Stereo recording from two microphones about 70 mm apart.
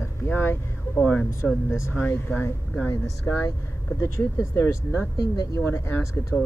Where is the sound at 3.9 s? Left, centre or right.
Left.